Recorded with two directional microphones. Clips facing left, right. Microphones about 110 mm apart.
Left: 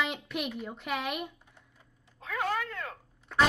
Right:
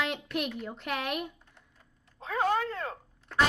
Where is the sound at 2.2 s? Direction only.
30° right (ahead or behind).